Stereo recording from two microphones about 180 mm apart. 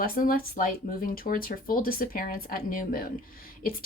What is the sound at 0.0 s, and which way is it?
Speech, 50° left (ahead or behind).